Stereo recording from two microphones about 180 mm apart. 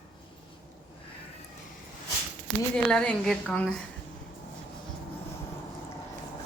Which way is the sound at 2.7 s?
5° left (ahead or behind).